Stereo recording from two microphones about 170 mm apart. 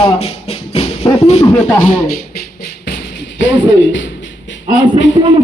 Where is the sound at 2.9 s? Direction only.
80° left.